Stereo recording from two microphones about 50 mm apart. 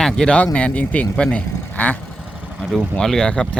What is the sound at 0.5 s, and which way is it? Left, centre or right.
Speech, left.